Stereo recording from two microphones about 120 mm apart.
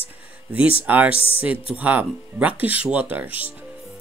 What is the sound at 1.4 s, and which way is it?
Speech, 10° right (ahead or behind).